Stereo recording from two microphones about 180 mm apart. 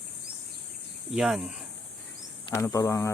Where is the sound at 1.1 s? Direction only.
Centre (ahead or behind).